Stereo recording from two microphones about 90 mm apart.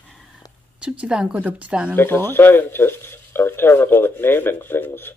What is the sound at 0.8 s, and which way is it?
A woman's voice, 10° right (ahead or behind).